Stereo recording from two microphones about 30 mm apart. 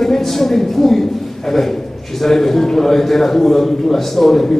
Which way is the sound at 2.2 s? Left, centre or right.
Centre.